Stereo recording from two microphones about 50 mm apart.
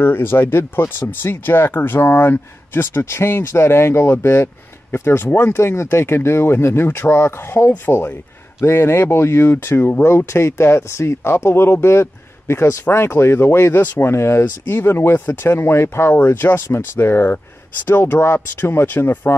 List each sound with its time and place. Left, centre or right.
0.0 s speech: left
8.5 s speech: left
10.0 s speech: left
11.3 s speech: left
14.7 s speech: left
18.2 s speech: left